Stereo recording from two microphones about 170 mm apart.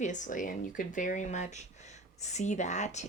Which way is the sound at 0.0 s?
45° left (ahead or behind).